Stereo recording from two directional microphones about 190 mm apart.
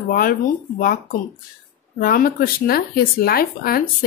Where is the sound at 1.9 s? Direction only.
50° left (ahead or behind).